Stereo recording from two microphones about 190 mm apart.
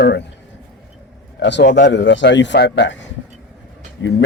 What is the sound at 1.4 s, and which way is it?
Speech, 65° left (ahead or behind).